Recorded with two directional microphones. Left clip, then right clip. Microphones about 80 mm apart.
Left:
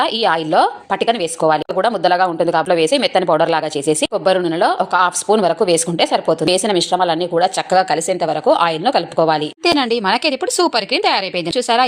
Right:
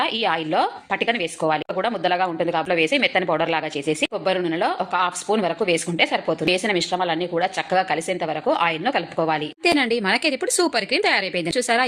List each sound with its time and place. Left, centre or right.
0.0 s speech: left
9.6 s speech: left